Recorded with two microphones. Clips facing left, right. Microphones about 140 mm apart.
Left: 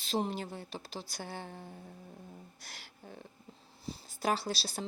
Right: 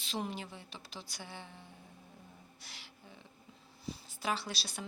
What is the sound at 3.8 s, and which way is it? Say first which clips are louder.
Speech: left 4 dB; 35° left (ahead or behind).